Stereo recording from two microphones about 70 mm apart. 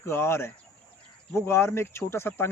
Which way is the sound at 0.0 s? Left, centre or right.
Left.